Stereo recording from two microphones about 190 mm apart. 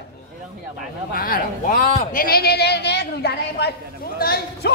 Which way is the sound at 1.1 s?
45° left (ahead or behind).